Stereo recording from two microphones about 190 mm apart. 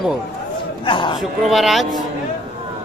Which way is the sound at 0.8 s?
25° left (ahead or behind).